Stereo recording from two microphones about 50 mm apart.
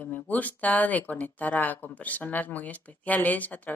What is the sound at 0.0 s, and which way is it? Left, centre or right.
Speech, left.